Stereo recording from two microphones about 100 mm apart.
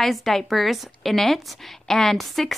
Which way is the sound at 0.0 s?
Centre (ahead or behind).